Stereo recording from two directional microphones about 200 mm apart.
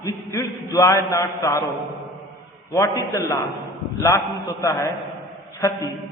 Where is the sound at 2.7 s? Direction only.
15° left (ahead or behind).